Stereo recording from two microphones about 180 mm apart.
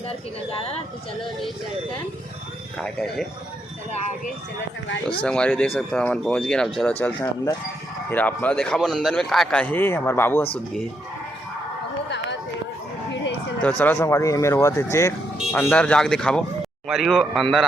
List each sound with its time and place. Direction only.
2.7 s speech: 5° left (ahead or behind)
5.2 s speech: 5° left (ahead or behind)
8.1 s a man's voice: 10° left (ahead or behind)
13.6 s a man's voice: 10° left (ahead or behind)